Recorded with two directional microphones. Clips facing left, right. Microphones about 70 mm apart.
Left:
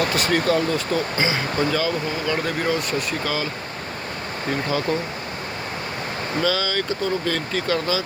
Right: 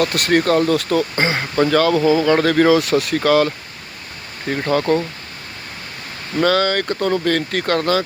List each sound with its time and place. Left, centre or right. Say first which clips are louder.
0.2 s speech: right 6 dB; right
1.1 s speech: right 3 dB; right
4.6 s speech: right 8 dB; right
6.4 s speech: right 8 dB; right